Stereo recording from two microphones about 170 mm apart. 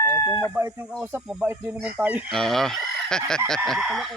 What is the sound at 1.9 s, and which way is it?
Speech, 10° right (ahead or behind).